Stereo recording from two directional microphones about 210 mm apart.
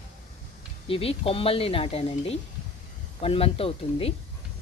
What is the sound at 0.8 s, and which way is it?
Speech, 25° left (ahead or behind).